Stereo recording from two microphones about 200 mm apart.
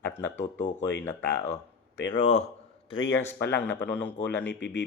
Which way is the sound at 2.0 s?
70° left (ahead or behind).